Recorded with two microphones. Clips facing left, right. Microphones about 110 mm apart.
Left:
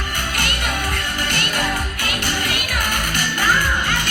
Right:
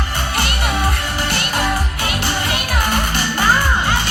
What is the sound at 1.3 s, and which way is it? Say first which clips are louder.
Music: right 3 dB; 20° right (ahead or behind).